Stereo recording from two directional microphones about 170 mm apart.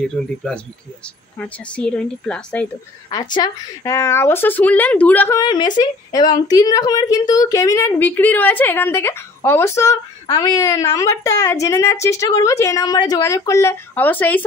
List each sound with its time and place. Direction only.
0.1 s a woman's voice: 5° left (ahead or behind)
3.1 s a woman's voice: 25° left (ahead or behind)
5.4 s a woman's voice: 25° left (ahead or behind)